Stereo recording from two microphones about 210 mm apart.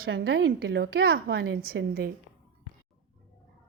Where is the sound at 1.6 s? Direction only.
45° right (ahead or behind).